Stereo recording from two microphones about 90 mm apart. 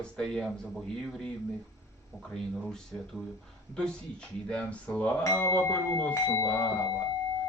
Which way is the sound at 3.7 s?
10° left (ahead or behind).